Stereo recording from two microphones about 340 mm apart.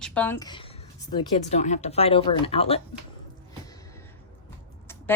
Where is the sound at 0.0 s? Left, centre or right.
Centre.